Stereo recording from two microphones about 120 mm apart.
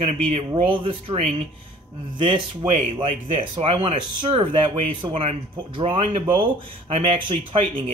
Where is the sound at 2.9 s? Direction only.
50° right (ahead or behind).